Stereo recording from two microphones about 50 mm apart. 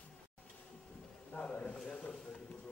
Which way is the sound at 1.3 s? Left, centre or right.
Left.